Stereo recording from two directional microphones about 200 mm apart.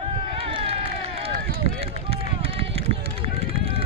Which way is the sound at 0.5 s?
30° right (ahead or behind).